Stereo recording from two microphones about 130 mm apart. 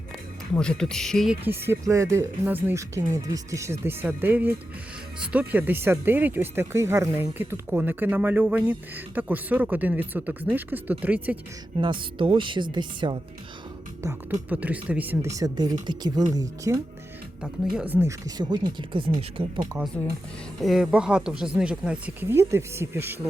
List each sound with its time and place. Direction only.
0.5 s speech: 5° left (ahead or behind)
1.5 s speech: 15° right (ahead or behind)
11.8 s speech: 40° right (ahead or behind)
14.0 s speech: 20° right (ahead or behind)
15.4 s speech: 30° right (ahead or behind)
17.4 s speech: 5° right (ahead or behind)
18.3 s speech: 35° right (ahead or behind)
20.6 s speech: centre (ahead or behind)